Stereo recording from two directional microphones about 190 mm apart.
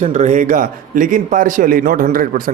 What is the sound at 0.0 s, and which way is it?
A man's voice, 40° right (ahead or behind).